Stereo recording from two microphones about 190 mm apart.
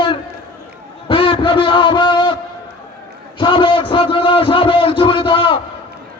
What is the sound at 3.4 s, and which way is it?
A man's voice, 25° left (ahead or behind).